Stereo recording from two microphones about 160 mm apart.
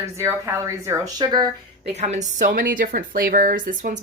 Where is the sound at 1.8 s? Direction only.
45° right (ahead or behind).